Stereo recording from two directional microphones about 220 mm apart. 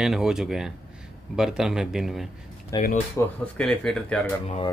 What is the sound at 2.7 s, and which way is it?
Speech, 15° left (ahead or behind).